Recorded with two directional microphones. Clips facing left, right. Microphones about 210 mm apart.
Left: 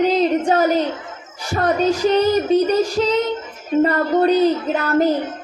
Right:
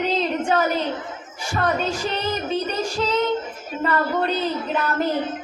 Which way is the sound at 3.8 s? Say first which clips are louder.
Left 3 dB; 40° left (ahead or behind).